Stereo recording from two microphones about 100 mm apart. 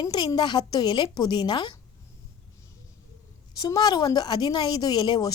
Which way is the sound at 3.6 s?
40° left (ahead or behind).